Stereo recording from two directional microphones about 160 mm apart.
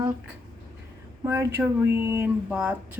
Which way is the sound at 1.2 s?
15° right (ahead or behind).